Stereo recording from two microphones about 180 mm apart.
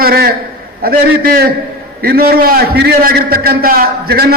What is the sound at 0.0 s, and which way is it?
A man's voice, 60° right (ahead or behind).